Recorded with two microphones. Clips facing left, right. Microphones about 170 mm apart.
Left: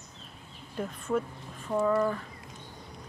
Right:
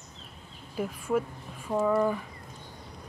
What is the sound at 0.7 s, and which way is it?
Speech, 10° right (ahead or behind).